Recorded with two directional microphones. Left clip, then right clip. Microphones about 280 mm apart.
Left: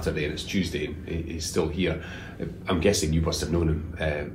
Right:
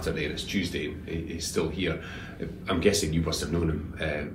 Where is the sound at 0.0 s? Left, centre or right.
Centre.